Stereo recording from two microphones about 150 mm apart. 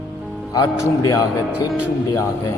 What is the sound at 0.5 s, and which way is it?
Speech, 25° left (ahead or behind).